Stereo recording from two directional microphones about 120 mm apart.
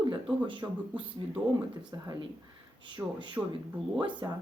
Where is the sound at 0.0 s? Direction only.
45° right (ahead or behind).